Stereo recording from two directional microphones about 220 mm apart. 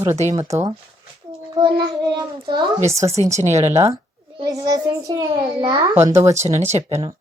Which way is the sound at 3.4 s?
30° right (ahead or behind).